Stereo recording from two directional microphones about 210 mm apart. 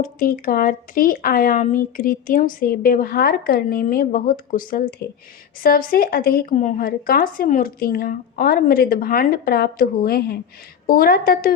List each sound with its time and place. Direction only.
0.0 s speech: 40° left (ahead or behind)